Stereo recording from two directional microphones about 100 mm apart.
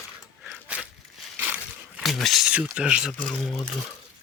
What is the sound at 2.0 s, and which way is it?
Speech, centre (ahead or behind).